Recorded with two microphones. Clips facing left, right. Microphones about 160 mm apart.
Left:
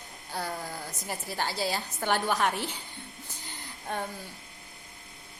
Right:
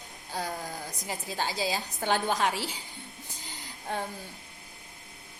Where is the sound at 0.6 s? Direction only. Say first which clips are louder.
Even; 45° right (ahead or behind).